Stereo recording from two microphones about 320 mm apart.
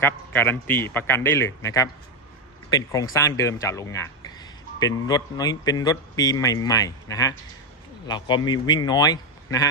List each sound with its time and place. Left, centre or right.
0.0 s speech: centre